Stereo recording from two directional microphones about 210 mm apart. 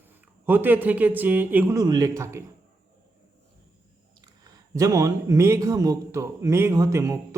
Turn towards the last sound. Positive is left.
turn(degrees=-15)  # may be behind; listen again after turning